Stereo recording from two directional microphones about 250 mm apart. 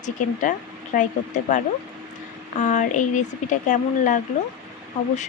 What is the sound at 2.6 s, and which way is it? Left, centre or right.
Speech, left.